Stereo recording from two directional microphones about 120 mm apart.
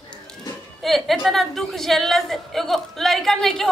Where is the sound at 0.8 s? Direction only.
Centre (ahead or behind).